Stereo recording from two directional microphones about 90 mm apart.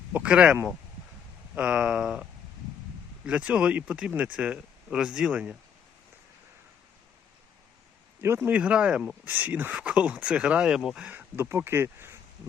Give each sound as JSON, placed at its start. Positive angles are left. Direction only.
{"t": 0.1, "sound": "speech", "side_deg": -15}
{"t": 3.2, "sound": "speech", "side_deg": -15}
{"t": 8.2, "sound": "speech", "side_deg": -30}
{"t": 8.4, "sound": "speech", "side_deg": -15}
{"t": 11.3, "sound": "speech", "side_deg": -30}